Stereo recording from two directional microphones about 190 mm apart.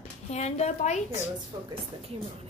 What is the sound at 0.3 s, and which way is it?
Speech, 35° left (ahead or behind).